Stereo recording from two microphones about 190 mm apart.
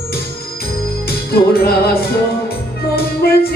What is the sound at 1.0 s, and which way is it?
Music, 55° left (ahead or behind).